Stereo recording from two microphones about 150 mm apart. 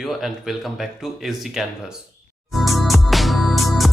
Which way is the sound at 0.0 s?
Centre (ahead or behind).